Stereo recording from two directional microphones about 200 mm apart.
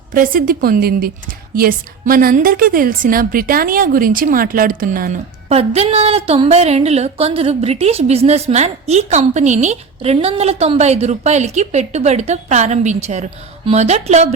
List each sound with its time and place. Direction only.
0.1 s a woman's voice: 45° right (ahead or behind)
5.5 s speech: 30° right (ahead or behind)